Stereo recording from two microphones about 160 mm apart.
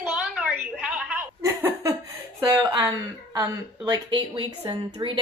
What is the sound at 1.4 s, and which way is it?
Laughter, 15° right (ahead or behind).